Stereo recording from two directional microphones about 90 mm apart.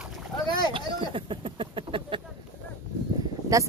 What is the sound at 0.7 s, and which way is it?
Speech, 75° right (ahead or behind).